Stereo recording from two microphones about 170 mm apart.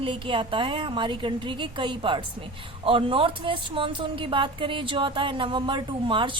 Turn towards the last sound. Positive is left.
turn(degrees=-30)  # may be behind; listen again after turning